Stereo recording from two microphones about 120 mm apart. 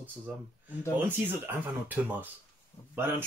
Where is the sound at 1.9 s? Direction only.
15° right (ahead or behind).